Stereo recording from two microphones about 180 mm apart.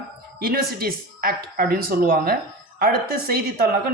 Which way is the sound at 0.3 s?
55° right (ahead or behind).